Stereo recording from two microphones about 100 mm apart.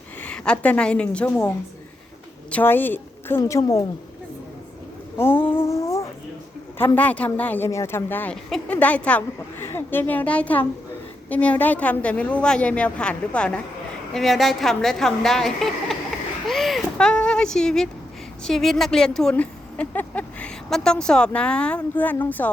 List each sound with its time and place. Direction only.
0.2 s a woman's voice: 10° left (ahead or behind)
2.5 s a woman's voice: 20° left (ahead or behind)
5.1 s a sound: 20° left (ahead or behind)
6.7 s a woman's voice: 20° left (ahead or behind)
8.3 s a woman's voice: centre (ahead or behind)
8.6 s a woman's voice: 15° left (ahead or behind)
16.5 s a sound: centre (ahead or behind)
18.4 s a woman's voice: 5° left (ahead or behind)
20.7 s a woman's voice: 5° left (ahead or behind)